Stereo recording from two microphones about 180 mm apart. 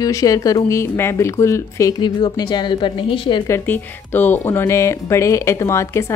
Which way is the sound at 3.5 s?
10° left (ahead or behind).